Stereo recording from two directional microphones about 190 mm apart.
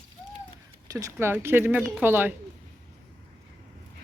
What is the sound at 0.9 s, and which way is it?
Speech, 15° right (ahead or behind).